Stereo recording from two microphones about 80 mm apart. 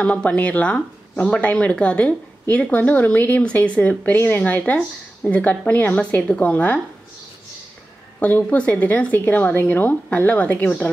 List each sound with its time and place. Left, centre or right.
0.0 s speech: centre
8.2 s a woman's voice: centre